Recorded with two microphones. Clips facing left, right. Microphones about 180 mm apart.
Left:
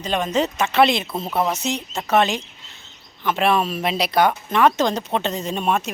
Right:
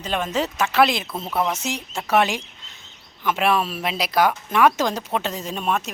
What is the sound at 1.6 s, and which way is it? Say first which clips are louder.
Speech: left 3 dB; 10° right (ahead or behind).